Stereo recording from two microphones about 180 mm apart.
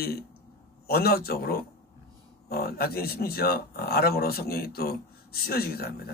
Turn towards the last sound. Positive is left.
turn(degrees=60)  # may be behind; listen again after turning